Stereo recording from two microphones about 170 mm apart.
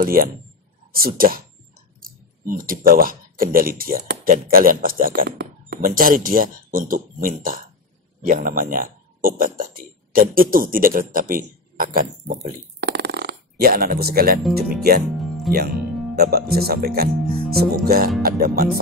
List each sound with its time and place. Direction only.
0.0 s speech: 60° right (ahead or behind)
15.1 s music: centre (ahead or behind)
16.2 s speech: 65° right (ahead or behind)
17.2 s speech: centre (ahead or behind)
17.5 s speech: 60° right (ahead or behind)